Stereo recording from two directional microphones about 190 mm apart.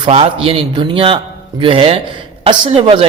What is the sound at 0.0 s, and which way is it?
Speech, 30° right (ahead or behind).